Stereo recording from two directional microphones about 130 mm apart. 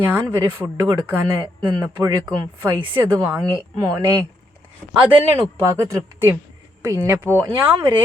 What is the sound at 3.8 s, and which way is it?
Speech, 25° right (ahead or behind).